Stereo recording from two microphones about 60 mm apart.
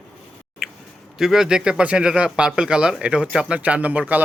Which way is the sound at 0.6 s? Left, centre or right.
Centre.